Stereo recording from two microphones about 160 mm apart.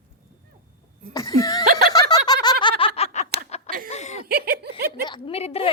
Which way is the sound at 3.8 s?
45° left (ahead or behind).